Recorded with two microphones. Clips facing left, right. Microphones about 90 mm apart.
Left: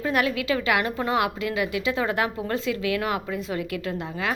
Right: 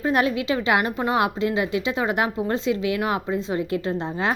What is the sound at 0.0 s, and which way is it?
Speech, 25° right (ahead or behind).